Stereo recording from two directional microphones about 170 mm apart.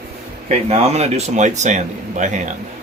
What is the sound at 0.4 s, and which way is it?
Speech, 40° right (ahead or behind).